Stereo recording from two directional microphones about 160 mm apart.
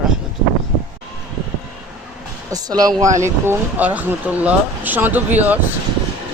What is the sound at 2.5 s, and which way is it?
Speech, 25° right (ahead or behind).